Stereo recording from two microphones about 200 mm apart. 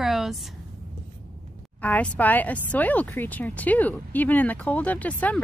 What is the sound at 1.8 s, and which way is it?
A woman's voice, 10° left (ahead or behind).